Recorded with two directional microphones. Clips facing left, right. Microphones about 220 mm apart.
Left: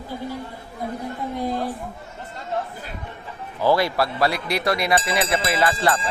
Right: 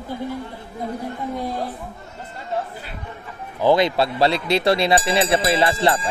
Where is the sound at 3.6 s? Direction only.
20° right (ahead or behind).